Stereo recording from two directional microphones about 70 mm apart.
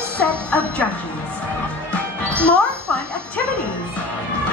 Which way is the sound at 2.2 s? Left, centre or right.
Centre.